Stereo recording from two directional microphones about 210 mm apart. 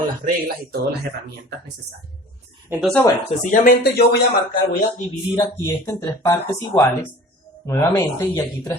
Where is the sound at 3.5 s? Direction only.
45° left (ahead or behind).